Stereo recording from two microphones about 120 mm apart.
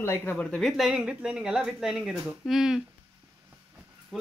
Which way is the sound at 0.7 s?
5° right (ahead or behind).